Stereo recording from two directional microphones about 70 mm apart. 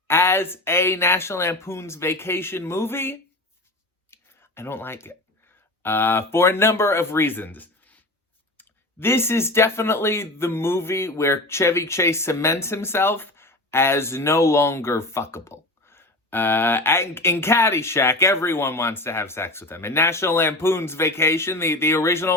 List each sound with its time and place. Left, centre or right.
0.1 s speech: left
4.1 s a sound: left
5.8 s speech: left